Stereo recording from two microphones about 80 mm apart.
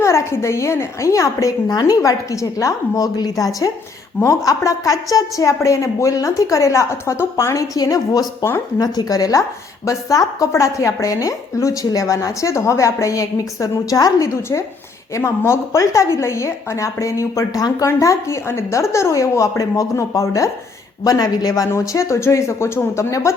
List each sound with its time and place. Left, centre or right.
0.0 s a woman's voice: left
7.8 s a woman's voice: left
21.7 s a woman's voice: left